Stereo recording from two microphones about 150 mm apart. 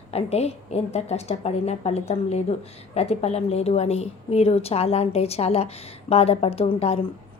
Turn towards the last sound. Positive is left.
turn(degrees=40)  # may be behind; listen again after turning